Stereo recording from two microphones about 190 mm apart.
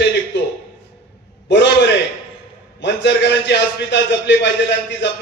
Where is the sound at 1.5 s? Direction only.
65° left (ahead or behind).